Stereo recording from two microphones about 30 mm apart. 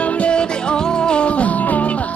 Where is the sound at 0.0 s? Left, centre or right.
Left.